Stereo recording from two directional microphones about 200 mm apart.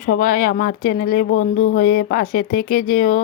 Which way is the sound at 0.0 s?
45° left (ahead or behind).